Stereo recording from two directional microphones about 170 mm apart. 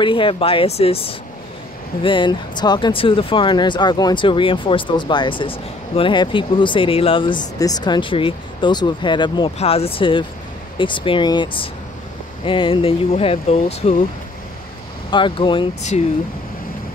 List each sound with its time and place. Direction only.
0.0 s speech: 30° left (ahead or behind)
15.0 s speech: 30° left (ahead or behind)